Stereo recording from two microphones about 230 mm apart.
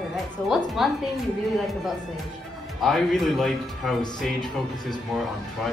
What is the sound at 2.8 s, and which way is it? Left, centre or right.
A woman's voice, centre.